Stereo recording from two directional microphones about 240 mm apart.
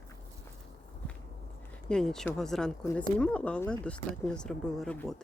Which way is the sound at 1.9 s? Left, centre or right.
Centre.